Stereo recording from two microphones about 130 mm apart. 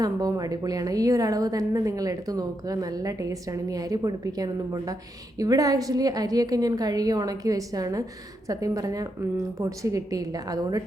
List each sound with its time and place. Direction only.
0.0 s a woman's voice: 30° right (ahead or behind)